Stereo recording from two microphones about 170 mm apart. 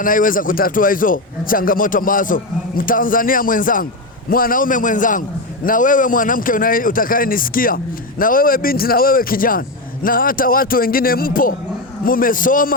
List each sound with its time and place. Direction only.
0.0 s a man's voice: 55° left (ahead or behind)